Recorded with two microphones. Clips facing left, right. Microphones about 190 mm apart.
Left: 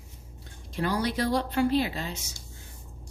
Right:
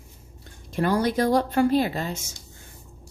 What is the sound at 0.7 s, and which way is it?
Speech, 50° right (ahead or behind).